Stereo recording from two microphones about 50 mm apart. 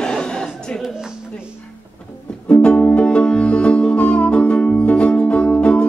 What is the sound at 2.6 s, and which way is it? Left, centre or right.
Music, left.